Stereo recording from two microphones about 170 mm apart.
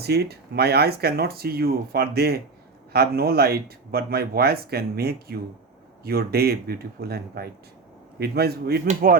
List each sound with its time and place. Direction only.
0.0 s speech: 70° right (ahead or behind)
8.9 s speech: 55° right (ahead or behind)